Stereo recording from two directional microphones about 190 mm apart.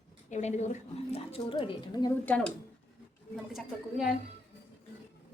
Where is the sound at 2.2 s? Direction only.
5° left (ahead or behind).